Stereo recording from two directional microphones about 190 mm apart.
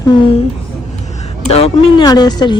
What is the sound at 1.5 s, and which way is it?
A woman's voice, 25° left (ahead or behind).